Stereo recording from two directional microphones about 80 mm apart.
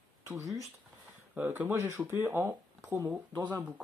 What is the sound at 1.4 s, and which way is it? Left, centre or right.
Speech, right.